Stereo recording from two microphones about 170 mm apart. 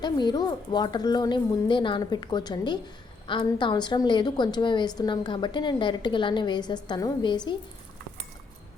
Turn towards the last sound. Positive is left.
turn(degrees=25)  # may be behind; listen again after turning